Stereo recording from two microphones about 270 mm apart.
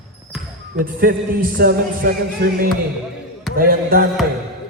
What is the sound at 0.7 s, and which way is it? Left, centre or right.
A man's voice, right.